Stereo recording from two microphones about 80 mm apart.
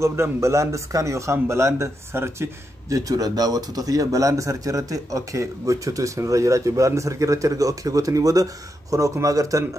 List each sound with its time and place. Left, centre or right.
0.0 s speech: right
3.0 s a man's voice: right